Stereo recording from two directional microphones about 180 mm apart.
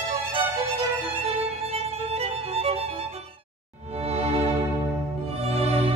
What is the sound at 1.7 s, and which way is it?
Violin, 35° right (ahead or behind).